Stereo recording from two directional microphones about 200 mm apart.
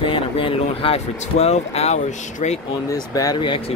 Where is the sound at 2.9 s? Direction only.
15° left (ahead or behind).